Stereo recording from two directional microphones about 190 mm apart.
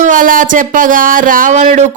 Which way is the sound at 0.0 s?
45° right (ahead or behind).